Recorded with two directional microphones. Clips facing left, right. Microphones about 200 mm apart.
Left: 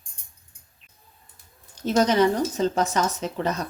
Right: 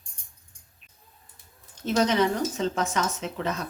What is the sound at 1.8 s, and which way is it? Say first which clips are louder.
Speech: left 3 dB; 40° left (ahead or behind).